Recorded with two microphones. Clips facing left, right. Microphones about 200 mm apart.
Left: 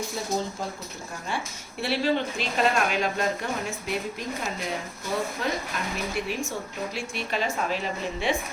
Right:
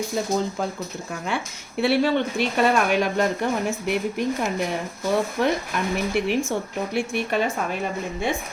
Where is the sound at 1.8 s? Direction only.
60° right (ahead or behind).